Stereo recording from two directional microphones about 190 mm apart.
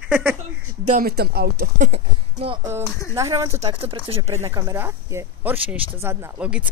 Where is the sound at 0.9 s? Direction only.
50° right (ahead or behind).